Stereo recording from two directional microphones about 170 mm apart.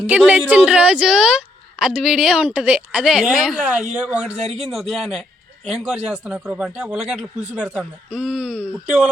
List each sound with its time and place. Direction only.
0.3 s a woman's voice: 10° right (ahead or behind)
4.4 s a man's voice: 40° right (ahead or behind)
4.7 s speech: centre (ahead or behind)